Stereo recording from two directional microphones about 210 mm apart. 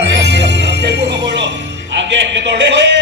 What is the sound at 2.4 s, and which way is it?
Speech, 55° right (ahead or behind).